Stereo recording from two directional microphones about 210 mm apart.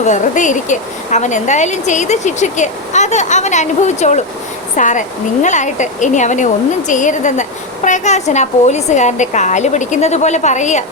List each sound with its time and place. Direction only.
0.0 s speech: 35° left (ahead or behind)